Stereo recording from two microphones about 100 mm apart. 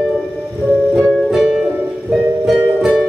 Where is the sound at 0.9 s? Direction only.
Centre (ahead or behind).